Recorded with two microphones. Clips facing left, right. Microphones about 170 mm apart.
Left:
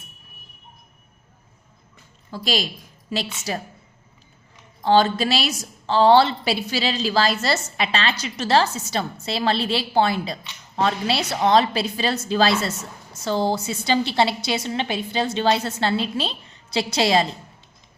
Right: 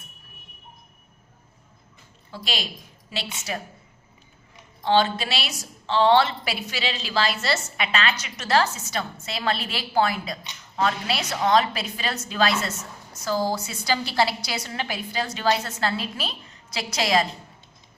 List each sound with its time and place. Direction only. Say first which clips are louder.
2.3 s a woman's voice: left 7 dB; 40° left (ahead or behind)
4.8 s a woman's voice: left 4 dB; 40° left (ahead or behind)